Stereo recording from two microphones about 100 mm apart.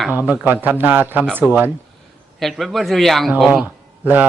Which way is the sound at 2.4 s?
Centre (ahead or behind).